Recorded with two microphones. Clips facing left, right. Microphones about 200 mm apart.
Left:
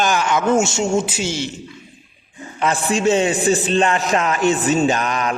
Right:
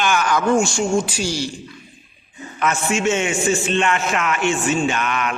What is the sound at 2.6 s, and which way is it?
A man's voice, 35° left (ahead or behind).